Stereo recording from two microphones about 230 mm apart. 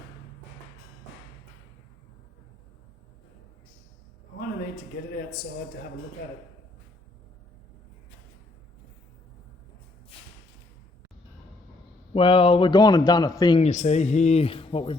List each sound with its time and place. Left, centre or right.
12.1 s a man's voice: left
13.7 s a man's voice: left